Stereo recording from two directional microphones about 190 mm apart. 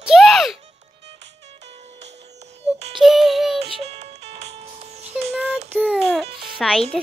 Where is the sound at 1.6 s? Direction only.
35° right (ahead or behind).